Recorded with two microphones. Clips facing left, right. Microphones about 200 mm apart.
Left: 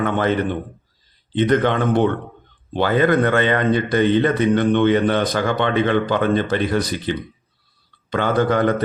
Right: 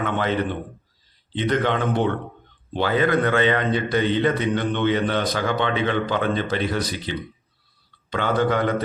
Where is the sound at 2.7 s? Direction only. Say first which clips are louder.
Left 4 dB; 50° left (ahead or behind).